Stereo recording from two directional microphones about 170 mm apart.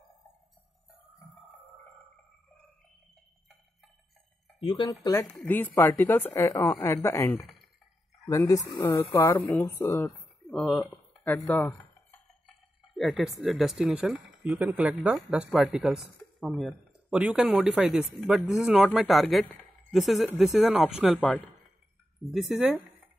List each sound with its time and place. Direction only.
4.6 s speech: 30° left (ahead or behind)
5.0 s a woman's voice: 15° left (ahead or behind)
7.4 s clicking: centre (ahead or behind)
8.3 s speech: 20° left (ahead or behind); by 22.8 s 5° right (ahead or behind)